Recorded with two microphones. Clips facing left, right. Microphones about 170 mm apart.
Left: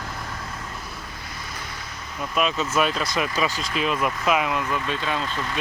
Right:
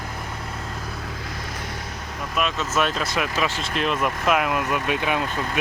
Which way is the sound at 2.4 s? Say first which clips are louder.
Left 1 dB; centre (ahead or behind).